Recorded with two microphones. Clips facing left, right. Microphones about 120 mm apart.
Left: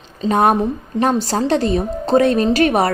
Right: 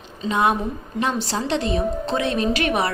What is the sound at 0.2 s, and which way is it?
A woman's voice, 45° left (ahead or behind).